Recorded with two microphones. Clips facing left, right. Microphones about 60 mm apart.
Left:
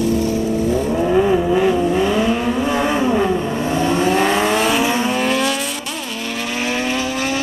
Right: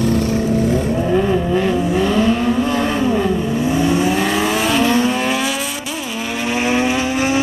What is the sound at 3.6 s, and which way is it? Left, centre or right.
Vehicle, centre.